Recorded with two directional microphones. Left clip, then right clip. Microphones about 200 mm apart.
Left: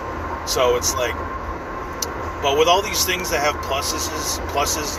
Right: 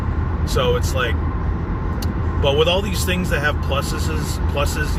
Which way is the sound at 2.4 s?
20° right (ahead or behind).